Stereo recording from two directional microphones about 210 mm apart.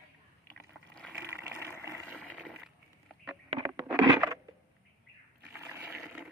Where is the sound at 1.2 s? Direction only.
10° right (ahead or behind).